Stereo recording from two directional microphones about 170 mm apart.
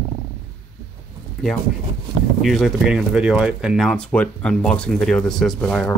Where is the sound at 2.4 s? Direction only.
Centre (ahead or behind).